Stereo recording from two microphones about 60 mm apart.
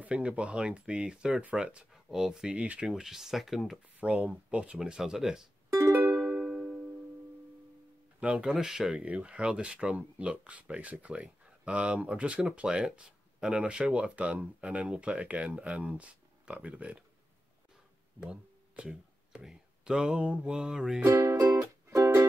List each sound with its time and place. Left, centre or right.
0.0 s speech: right
2.5 s speech: right
2.9 s speech: centre
4.0 s speech: right
6.2 s music: centre
8.2 s speech: centre
9.0 s speech: right
18.2 s speech: centre
21.1 s music: right